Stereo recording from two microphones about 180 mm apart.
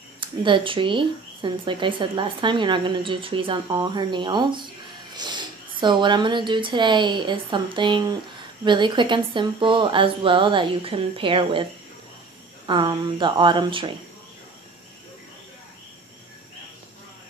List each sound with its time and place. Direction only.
0.2 s speech: 30° right (ahead or behind)
12.6 s speech: 25° right (ahead or behind)